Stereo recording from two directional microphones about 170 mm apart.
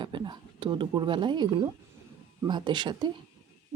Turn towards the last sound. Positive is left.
turn(degrees=-25)  # may be behind; listen again after turning